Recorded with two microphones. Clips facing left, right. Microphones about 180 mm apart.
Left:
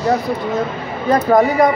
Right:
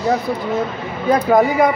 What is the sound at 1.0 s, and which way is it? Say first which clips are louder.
Speech: left 1 dB; 5° right (ahead or behind).